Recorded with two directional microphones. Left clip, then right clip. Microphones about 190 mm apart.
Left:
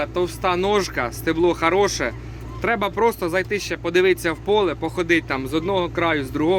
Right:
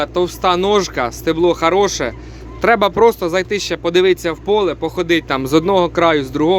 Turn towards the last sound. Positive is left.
turn(degrees=-20)  # may be behind; listen again after turning